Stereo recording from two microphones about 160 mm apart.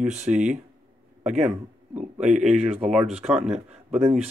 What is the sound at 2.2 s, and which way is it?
Speech, 50° right (ahead or behind).